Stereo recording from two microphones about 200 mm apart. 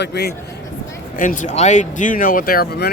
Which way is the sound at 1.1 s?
40° left (ahead or behind).